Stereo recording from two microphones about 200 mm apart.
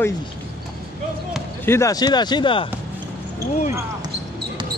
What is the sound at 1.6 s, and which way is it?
Speech, 15° left (ahead or behind).